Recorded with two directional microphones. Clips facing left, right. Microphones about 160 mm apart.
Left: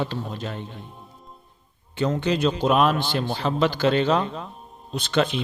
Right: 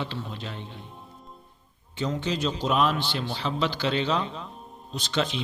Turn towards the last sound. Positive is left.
turn(degrees=55)  # may be behind; listen again after turning